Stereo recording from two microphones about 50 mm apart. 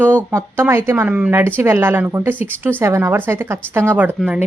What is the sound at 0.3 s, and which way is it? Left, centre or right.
Speech, right.